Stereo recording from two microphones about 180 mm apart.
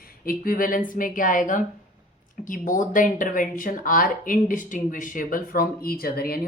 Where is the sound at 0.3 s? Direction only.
50° left (ahead or behind).